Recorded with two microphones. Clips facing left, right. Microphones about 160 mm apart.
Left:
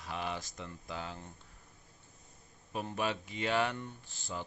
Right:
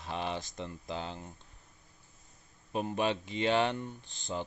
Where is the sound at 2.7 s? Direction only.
20° right (ahead or behind).